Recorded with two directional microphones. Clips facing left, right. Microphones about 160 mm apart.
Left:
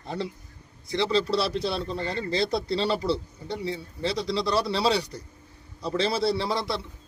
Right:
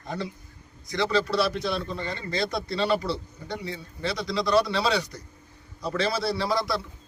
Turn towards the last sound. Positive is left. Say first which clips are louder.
# right 1 dB
turn(degrees=25)  # may be behind; listen again after turning